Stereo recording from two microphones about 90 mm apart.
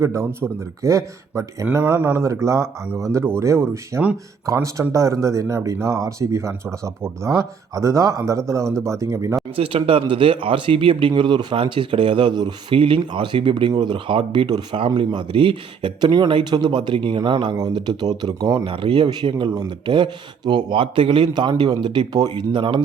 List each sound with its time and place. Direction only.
0.0 s speech: 30° right (ahead or behind)
9.6 s speech: 90° right; by 12.5 s 55° right (ahead or behind)
12.7 s a man's voice: 90° right; by 17.2 s 65° right (ahead or behind)
17.2 s speech: 75° right (ahead or behind)
17.6 s speech: 55° right (ahead or behind)
18.6 s speech: 75° right (ahead or behind)
19.5 s a man's voice: 55° right (ahead or behind)